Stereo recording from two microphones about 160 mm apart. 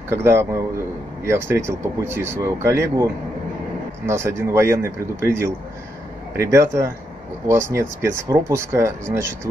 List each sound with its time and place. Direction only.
0.2 s speech: 15° right (ahead or behind)